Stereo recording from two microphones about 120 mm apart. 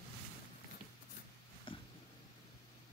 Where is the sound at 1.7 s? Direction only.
45° left (ahead or behind).